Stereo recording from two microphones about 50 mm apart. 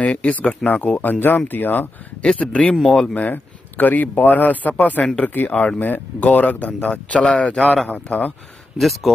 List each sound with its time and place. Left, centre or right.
0.0 s speech: left
2.2 s speech: centre
3.2 s speech: left
5.8 s speech: left
6.9 s speech: left
7.9 s speech: left
8.7 s speech: centre